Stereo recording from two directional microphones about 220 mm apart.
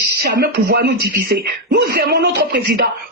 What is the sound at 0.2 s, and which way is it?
Speech, 45° right (ahead or behind).